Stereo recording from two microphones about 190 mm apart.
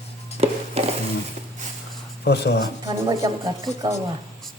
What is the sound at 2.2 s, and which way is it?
Speech, 60° left (ahead or behind).